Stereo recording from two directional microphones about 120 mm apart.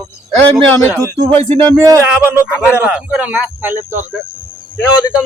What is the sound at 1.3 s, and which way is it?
Speech, 50° right (ahead or behind).